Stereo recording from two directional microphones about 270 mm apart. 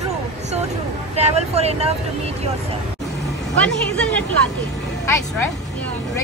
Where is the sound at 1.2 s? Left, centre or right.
Right.